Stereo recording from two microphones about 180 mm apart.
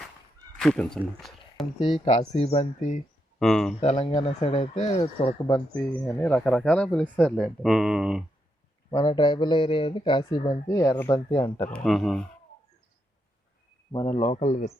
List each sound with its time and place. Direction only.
0.6 s speech: 5° left (ahead or behind)
1.8 s speech: 35° left (ahead or behind)
3.3 s speech: 5° left (ahead or behind)
3.8 s speech: 35° left (ahead or behind)
5.5 s speech: 20° left (ahead or behind)
6.1 s speech: 5° left (ahead or behind)
8.9 s speech: 20° left (ahead or behind)
11.7 s speech: 5° left (ahead or behind)
13.9 s speech: 30° left (ahead or behind)